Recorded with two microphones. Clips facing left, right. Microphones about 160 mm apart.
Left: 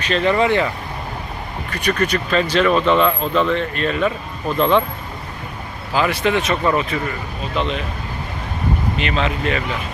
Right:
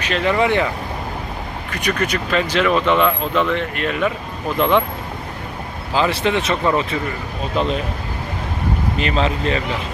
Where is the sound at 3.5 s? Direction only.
15° right (ahead or behind).